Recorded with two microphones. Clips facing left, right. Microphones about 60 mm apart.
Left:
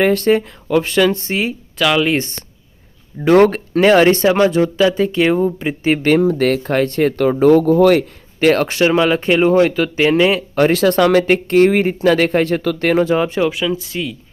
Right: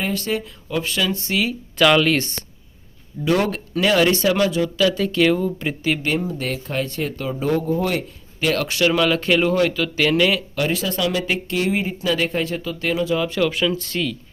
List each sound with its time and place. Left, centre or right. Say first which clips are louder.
0.0 s speech: left 10 dB; left
1.8 s speech: even; centre
2.0 s speech: left 2 dB; left
3.2 s speech: left 9 dB; left
6.1 s speech: left 10 dB; left
8.4 s speech: left 7 dB; left
10.7 s speech: left 11 dB; left
13.1 s speech: left 4 dB; left
13.5 s speech: left 2 dB; centre